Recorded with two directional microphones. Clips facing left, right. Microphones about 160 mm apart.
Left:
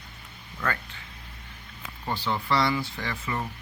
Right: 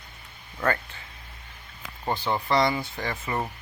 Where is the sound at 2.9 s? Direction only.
45° right (ahead or behind).